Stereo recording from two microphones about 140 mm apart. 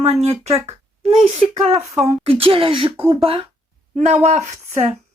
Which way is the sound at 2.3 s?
40° right (ahead or behind).